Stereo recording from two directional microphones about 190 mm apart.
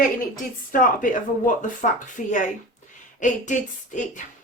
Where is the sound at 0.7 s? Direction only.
45° left (ahead or behind).